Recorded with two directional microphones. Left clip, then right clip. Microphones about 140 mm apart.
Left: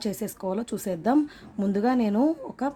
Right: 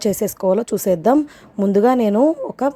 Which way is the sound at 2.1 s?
35° right (ahead or behind).